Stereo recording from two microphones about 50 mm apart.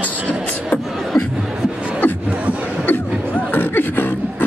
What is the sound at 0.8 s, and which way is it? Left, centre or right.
Beatboxing, centre.